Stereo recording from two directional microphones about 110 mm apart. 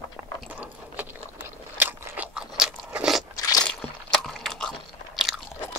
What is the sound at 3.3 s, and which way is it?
Scrape, 35° left (ahead or behind).